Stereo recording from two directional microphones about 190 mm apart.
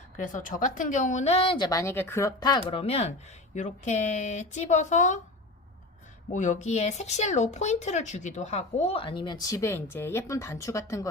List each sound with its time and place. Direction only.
0.2 s speech: 45° left (ahead or behind); by 2.6 s 20° left (ahead or behind)
2.6 s speech: 30° left (ahead or behind)
6.3 s speech: 40° left (ahead or behind); by 11.1 s 15° left (ahead or behind)